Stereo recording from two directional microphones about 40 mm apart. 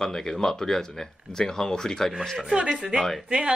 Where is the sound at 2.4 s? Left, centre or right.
Right.